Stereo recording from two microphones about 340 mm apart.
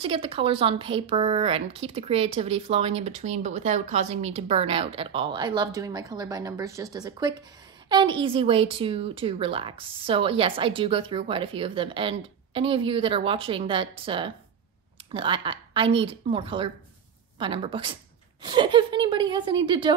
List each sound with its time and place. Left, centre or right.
0.0 s speech: centre